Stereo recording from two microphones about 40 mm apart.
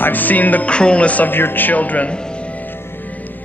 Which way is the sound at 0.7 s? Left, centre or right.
Left.